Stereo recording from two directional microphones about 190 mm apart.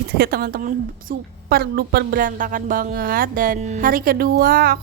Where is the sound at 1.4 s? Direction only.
55° right (ahead or behind).